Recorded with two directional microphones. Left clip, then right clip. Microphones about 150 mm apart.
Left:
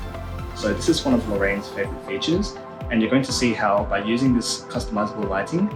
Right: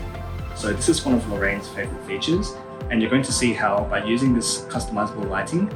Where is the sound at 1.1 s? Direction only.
25° left (ahead or behind).